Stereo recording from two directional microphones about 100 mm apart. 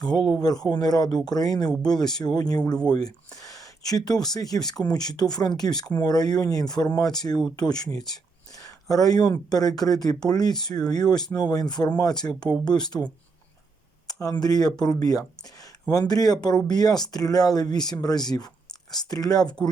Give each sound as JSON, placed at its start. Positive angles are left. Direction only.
{"t": 0.4, "sound": "speech", "side_deg": 40}
{"t": 7.3, "sound": "speech", "side_deg": 5}
{"t": 7.9, "sound": "a sound", "side_deg": 40}
{"t": 9.5, "sound": "speech", "side_deg": 40}
{"t": 14.1, "sound": "speech", "side_deg": 40}